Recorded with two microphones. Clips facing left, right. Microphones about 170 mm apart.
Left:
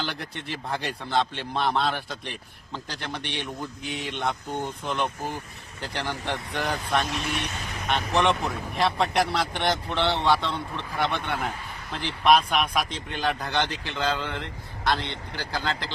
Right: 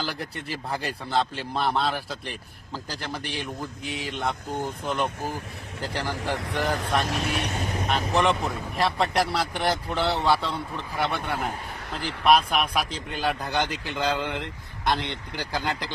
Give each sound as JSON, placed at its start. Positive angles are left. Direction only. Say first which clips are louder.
{"t": 0.0, "sound": "a man's voice", "louder": "right 1 dB", "side_deg": -5}
{"t": 14.9, "sound": "speech", "louder": "right 1 dB", "side_deg": -55}
{"t": 15.4, "sound": "speech", "louder": "right 1 dB", "side_deg": -15}